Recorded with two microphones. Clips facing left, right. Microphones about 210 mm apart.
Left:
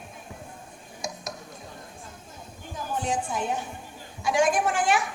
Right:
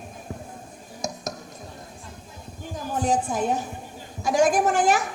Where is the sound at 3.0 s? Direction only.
40° right (ahead or behind).